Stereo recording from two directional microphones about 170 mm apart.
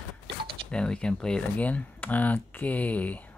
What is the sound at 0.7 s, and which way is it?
Speech, 5° left (ahead or behind).